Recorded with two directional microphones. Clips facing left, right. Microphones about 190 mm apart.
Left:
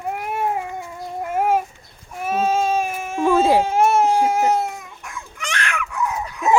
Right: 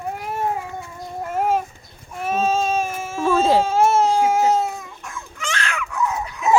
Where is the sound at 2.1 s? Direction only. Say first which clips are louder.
Left 1 dB; 10° left (ahead or behind).